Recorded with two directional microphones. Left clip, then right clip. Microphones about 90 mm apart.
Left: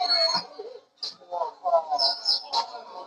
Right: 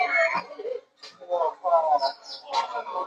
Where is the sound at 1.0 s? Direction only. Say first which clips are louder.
Right 3 dB; 30° right (ahead or behind).